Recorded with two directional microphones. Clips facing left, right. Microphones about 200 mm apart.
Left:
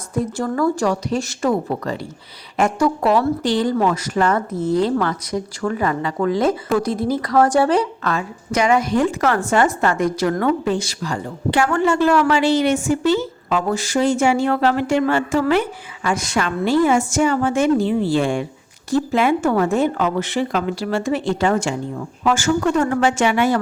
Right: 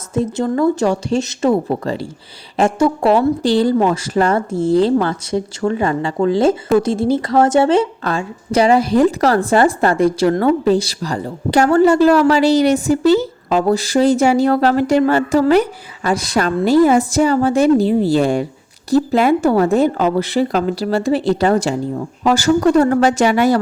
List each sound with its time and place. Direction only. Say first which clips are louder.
0.1 s a woman's voice: right 4 dB; 25° right (ahead or behind)